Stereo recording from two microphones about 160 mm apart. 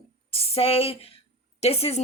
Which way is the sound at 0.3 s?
35° left (ahead or behind).